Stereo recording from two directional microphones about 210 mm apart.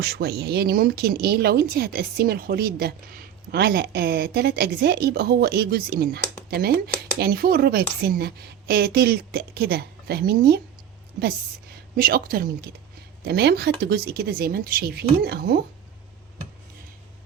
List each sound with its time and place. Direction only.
0.0 s speech: 50° right (ahead or behind)
11.9 s speech: 45° right (ahead or behind)